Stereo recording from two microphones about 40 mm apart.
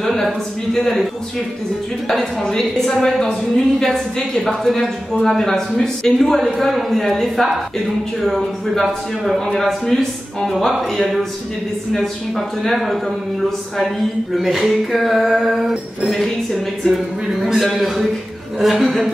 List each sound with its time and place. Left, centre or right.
0.0 s a sound: centre
0.7 s a woman's voice: centre
2.0 s a woman's voice: centre
16.1 s a man's voice: centre